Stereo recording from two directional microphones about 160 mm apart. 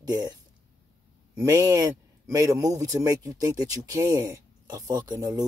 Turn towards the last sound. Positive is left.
turn(degrees=-25)  # may be behind; listen again after turning